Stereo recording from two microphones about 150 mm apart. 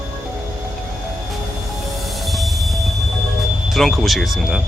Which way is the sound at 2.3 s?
Centre (ahead or behind).